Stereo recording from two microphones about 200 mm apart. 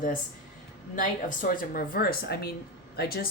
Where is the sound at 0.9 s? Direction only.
40° left (ahead or behind).